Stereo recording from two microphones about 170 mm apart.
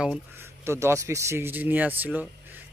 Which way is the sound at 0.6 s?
15° right (ahead or behind).